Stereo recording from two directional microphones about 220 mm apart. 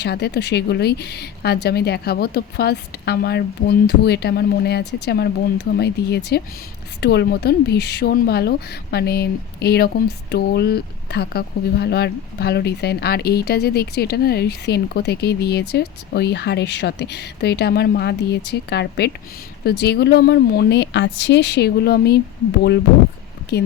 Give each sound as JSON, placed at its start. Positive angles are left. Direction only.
{"t": 0.0, "sound": "a woman's voice", "side_deg": 50}